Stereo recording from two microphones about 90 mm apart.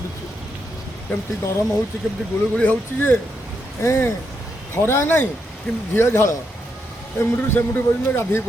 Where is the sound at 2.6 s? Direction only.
20° left (ahead or behind).